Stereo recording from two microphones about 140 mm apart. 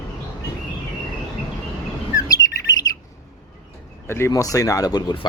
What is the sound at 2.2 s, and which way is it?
Bird, 25° left (ahead or behind).